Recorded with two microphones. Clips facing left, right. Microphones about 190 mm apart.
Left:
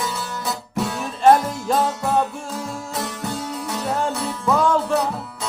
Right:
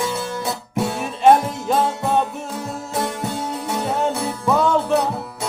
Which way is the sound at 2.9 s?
25° right (ahead or behind).